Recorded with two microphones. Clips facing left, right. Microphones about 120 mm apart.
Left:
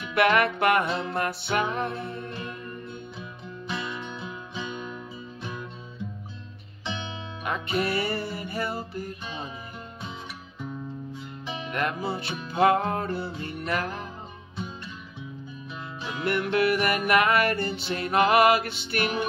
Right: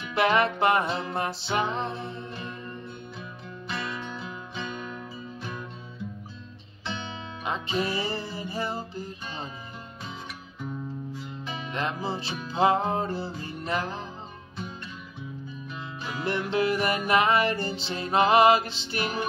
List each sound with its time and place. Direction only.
0.1 s music: 25° right (ahead or behind)
3.2 s music: centre (ahead or behind)
6.9 s guitar: centre (ahead or behind)
7.4 s music: 25° right (ahead or behind)
11.1 s music: centre (ahead or behind)
11.7 s music: 25° right (ahead or behind)
16.0 s music: centre (ahead or behind)
16.3 s music: 25° right (ahead or behind)
18.6 s music: 60° left (ahead or behind)
18.9 s music: 25° right (ahead or behind)